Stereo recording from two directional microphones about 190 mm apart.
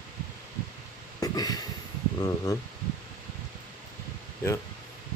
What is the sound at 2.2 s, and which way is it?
Speech, 20° left (ahead or behind).